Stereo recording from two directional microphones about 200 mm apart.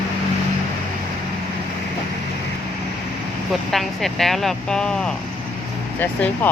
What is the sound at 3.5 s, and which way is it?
Speech, centre (ahead or behind).